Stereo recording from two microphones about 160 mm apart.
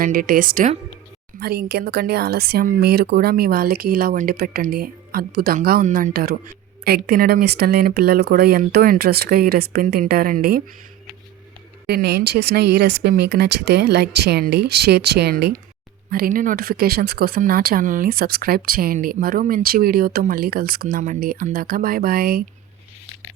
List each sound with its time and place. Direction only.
0.0 s speech: 60° right (ahead or behind)
1.4 s speech: 75° right (ahead or behind)
6.8 s speech: 75° right (ahead or behind)
11.9 s speech: 90° right
16.0 s speech: 60° right (ahead or behind)
20.8 s speech: 50° right (ahead or behind)